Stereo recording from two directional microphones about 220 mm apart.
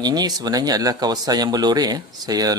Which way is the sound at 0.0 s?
20° right (ahead or behind).